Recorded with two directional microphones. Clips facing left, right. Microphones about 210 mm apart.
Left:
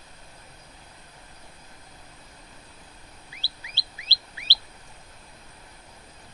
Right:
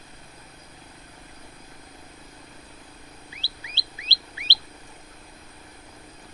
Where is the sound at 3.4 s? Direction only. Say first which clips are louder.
Right 3 dB; 20° right (ahead or behind).